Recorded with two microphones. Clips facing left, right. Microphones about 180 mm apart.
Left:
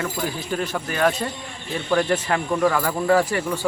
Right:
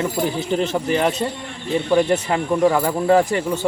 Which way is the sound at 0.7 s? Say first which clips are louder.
Right 3 dB; 20° right (ahead or behind).